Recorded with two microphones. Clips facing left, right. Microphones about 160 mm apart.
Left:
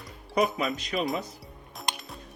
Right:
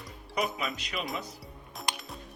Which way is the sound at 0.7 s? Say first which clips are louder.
Left 7 dB; 45° left (ahead or behind).